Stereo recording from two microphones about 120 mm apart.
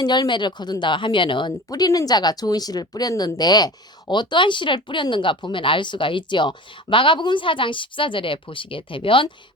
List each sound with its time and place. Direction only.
0.0 s speech: 35° left (ahead or behind)